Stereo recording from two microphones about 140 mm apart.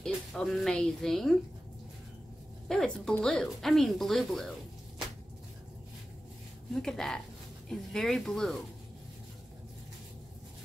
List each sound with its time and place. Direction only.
0.0 s speech: 5° left (ahead or behind)
2.7 s speech: 5° left (ahead or behind)
6.7 s speech: 5° left (ahead or behind)